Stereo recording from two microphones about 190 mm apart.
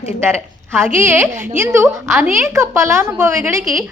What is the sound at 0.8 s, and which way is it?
A woman's voice, 10° right (ahead or behind).